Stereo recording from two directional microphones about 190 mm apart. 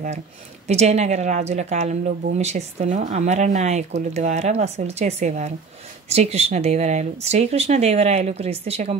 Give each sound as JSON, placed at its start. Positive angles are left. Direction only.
{"t": 0.7, "sound": "speech", "side_deg": -35}